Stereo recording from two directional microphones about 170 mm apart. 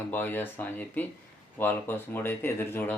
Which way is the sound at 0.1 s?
10° left (ahead or behind).